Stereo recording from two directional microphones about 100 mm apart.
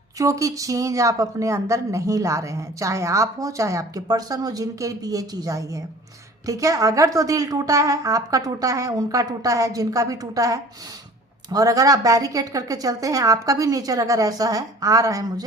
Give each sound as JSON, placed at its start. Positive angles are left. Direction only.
{"t": 0.2, "sound": "speech", "side_deg": -35}